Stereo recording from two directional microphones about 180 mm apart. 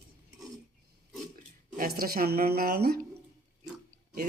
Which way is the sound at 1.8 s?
55° right (ahead or behind).